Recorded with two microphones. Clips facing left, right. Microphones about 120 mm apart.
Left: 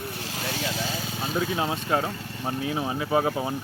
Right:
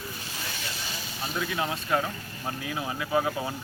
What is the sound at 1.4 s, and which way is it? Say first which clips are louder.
Speech: left 3 dB; 25° left (ahead or behind).